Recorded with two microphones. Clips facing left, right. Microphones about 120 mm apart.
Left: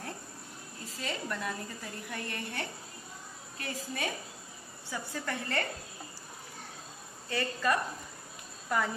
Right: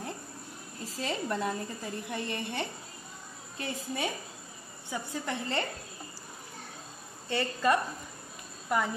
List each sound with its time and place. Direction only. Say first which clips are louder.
0.9 s a woman's voice: right 5 dB; 30° right (ahead or behind)
7.2 s a woman's voice: right 3 dB; 25° right (ahead or behind)